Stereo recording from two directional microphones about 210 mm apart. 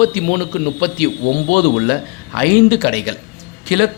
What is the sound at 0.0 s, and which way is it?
A man's voice, 40° left (ahead or behind).